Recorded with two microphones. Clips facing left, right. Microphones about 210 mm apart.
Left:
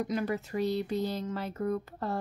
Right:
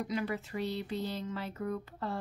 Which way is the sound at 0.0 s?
45° left (ahead or behind).